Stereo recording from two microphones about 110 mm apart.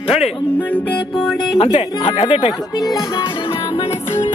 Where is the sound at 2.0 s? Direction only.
60° left (ahead or behind).